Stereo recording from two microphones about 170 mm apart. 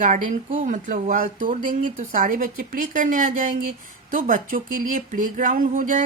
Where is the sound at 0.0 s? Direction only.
45° right (ahead or behind).